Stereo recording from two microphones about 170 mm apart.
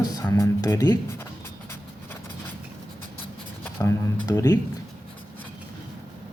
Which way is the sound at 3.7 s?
15° left (ahead or behind).